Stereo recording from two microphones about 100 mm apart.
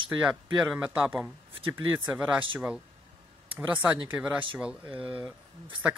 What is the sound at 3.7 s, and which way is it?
Speech, 15° right (ahead or behind).